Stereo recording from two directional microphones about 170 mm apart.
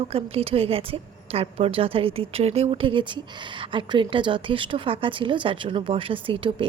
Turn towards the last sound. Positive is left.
turn(degrees=-30)  # may be behind; listen again after turning